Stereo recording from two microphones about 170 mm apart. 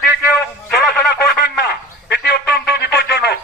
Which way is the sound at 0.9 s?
75° left (ahead or behind).